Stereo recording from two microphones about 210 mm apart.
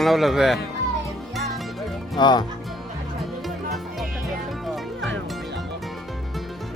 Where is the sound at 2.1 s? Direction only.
20° left (ahead or behind).